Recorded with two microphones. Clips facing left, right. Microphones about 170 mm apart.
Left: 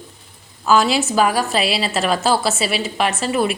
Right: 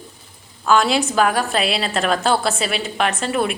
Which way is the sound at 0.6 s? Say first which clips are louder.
Left 1 dB; 5° left (ahead or behind).